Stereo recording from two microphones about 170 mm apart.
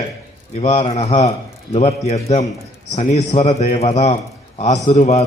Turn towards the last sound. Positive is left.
turn(degrees=40)  # may be behind; listen again after turning